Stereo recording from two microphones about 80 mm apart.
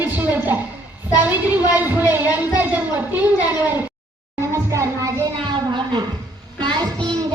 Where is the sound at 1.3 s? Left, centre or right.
Right.